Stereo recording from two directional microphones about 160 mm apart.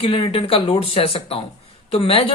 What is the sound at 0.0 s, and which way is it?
Speech, 35° left (ahead or behind).